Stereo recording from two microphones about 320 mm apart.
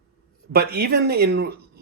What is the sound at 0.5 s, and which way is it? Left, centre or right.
Speech, right.